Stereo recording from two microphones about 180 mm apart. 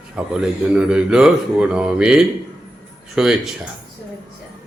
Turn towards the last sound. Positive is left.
turn(degrees=-5)  # may be behind; listen again after turning